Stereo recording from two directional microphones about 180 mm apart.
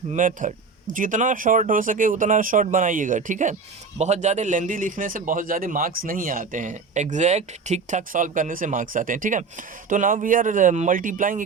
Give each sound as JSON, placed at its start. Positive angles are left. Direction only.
{"t": 0.1, "sound": "a man's voice", "side_deg": -45}